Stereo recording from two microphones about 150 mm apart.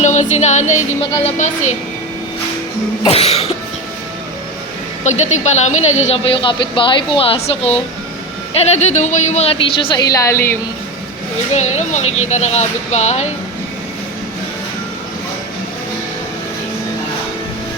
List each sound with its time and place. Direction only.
0.0 s speech: 50° left (ahead or behind)
3.0 s speech: 40° left (ahead or behind)
5.0 s speech: 50° left (ahead or behind)
10.1 s a woman's voice: 20° left (ahead or behind)
11.5 s speech: 50° left (ahead or behind)